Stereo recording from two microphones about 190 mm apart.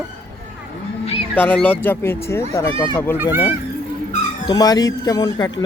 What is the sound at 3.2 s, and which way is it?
Speech, 10° right (ahead or behind).